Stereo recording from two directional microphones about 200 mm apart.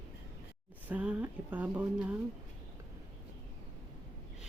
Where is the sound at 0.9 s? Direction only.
5° right (ahead or behind).